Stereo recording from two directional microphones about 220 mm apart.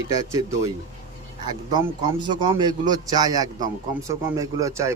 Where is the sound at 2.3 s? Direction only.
20° right (ahead or behind).